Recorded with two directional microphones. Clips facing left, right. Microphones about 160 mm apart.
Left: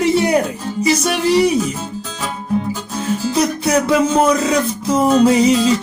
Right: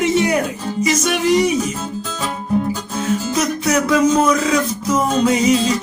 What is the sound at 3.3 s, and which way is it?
Music, 30° left (ahead or behind).